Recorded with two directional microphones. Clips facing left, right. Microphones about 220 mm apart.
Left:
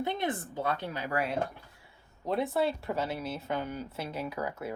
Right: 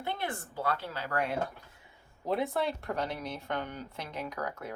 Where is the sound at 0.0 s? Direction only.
20° left (ahead or behind).